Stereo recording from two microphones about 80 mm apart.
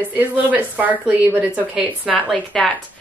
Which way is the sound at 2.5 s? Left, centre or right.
Centre.